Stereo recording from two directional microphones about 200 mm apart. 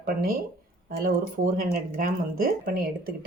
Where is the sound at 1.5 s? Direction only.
45° right (ahead or behind).